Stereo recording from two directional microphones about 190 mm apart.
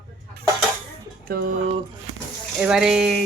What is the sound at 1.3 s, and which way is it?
Speech, 50° right (ahead or behind).